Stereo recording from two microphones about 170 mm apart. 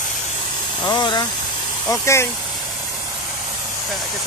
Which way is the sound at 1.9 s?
15° left (ahead or behind).